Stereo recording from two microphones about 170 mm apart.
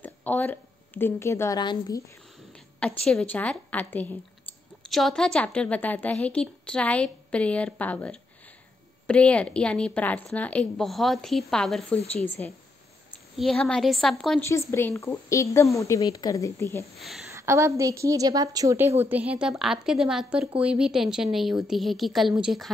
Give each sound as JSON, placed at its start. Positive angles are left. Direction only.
{"t": 0.0, "sound": "speech", "side_deg": 10}
{"t": 2.5, "sound": "a woman's voice", "side_deg": 5}
{"t": 14.4, "sound": "a woman's voice", "side_deg": 15}
{"t": 17.3, "sound": "a woman's voice", "side_deg": -15}